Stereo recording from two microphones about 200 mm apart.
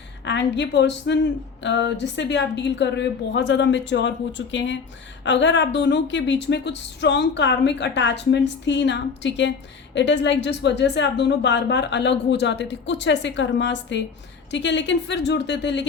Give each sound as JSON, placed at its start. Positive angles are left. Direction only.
{"t": 0.3, "sound": "speech", "side_deg": 65}